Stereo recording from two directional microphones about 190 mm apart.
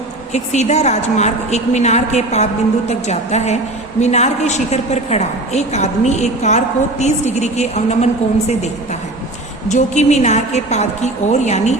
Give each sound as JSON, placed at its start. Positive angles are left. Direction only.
{"t": 0.3, "sound": "a woman's voice", "side_deg": 35}